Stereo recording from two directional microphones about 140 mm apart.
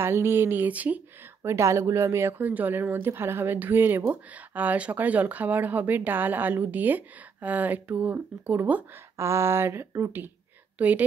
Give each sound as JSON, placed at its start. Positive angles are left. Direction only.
{"t": 0.0, "sound": "a woman's voice", "side_deg": -15}